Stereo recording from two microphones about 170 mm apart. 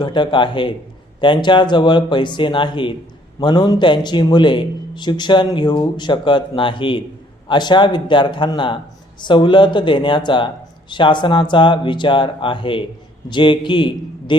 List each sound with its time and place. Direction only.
0.0 s a man's voice: 30° left (ahead or behind)